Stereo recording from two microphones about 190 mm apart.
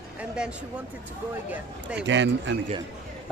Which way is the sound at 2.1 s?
75° right (ahead or behind).